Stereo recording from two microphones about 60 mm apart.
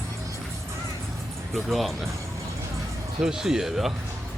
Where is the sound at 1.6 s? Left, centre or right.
Centre.